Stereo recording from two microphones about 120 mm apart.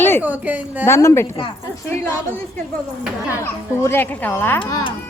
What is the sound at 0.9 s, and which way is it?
Speech, 20° left (ahead or behind).